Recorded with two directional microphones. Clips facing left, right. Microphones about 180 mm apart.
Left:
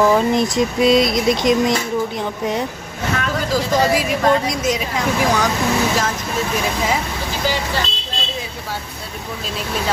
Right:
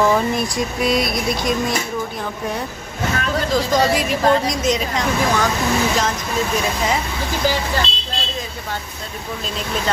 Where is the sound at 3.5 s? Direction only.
5° left (ahead or behind).